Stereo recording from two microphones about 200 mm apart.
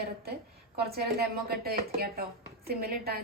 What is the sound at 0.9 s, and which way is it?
A woman's voice, 50° right (ahead or behind).